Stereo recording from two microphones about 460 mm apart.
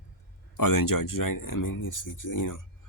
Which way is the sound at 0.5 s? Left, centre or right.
Left.